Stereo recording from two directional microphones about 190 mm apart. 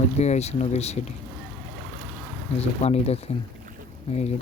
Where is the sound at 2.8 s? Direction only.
30° left (ahead or behind).